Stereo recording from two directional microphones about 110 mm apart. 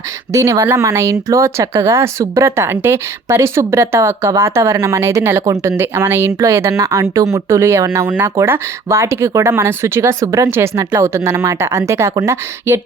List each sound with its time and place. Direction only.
0.3 s speech: 30° right (ahead or behind)